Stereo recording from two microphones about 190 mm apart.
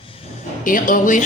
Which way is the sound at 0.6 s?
45° left (ahead or behind).